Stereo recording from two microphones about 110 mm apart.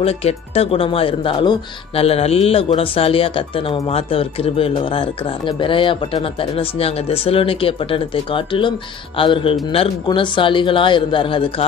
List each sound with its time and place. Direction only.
0.0 s speech: 65° left (ahead or behind); by 1.6 s 45° left (ahead or behind)
2.0 s speech: 65° left (ahead or behind)
10.0 s a man's voice: 45° left (ahead or behind)